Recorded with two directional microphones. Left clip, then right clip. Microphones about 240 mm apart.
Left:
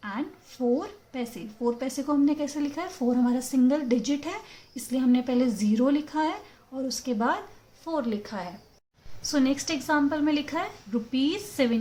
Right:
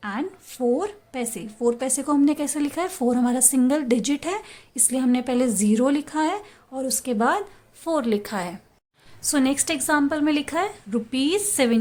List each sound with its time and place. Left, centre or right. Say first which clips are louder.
0.0 s a woman's voice: right 5 dB; right